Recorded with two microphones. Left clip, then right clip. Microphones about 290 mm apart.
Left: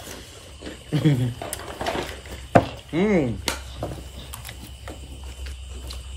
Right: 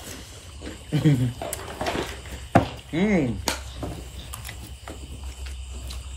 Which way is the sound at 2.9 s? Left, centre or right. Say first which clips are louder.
Left 3 dB; centre.